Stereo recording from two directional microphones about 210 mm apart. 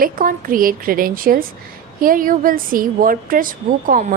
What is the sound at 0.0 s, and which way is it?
A woman's voice, 40° right (ahead or behind).